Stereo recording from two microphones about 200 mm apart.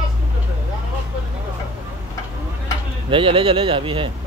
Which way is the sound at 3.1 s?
25° right (ahead or behind).